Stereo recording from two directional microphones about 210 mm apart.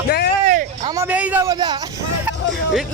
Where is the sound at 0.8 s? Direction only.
10° right (ahead or behind).